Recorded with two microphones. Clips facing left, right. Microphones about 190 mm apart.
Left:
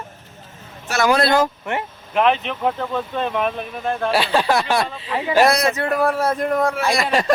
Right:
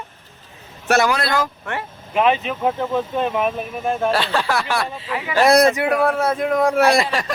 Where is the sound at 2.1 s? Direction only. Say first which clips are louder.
Even; 5° right (ahead or behind).